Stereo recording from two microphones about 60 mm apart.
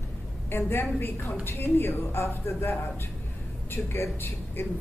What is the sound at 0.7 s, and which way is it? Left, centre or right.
A woman's voice, left.